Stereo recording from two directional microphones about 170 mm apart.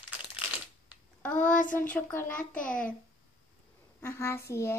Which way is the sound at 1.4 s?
50° left (ahead or behind).